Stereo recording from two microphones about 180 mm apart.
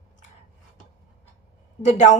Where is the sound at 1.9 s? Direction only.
40° left (ahead or behind).